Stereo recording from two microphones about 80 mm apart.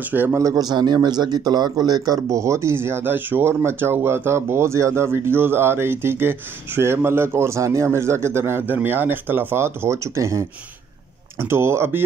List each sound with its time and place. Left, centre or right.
0.1 s speech: right
0.4 s a man's voice: right
2.2 s speech: right